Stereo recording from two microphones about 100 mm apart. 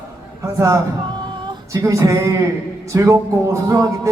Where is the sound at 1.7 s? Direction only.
30° right (ahead or behind).